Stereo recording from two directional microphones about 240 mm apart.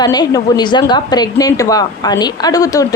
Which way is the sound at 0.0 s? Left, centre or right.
Centre.